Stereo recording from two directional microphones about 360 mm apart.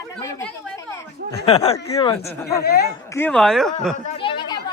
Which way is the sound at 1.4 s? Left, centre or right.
Centre.